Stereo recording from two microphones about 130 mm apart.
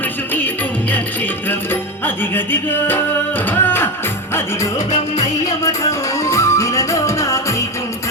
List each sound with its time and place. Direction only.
0.3 s music: 15° left (ahead or behind)
5.4 s music: 25° left (ahead or behind)